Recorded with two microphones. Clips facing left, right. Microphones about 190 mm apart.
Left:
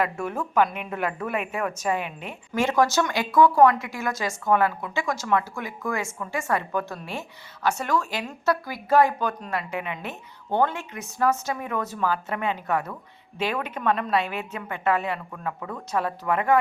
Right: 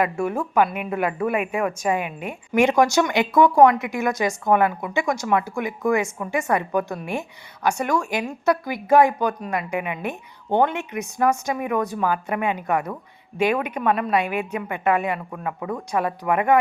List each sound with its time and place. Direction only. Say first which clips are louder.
0.0 s a woman's voice: right 4 dB; 10° right (ahead or behind)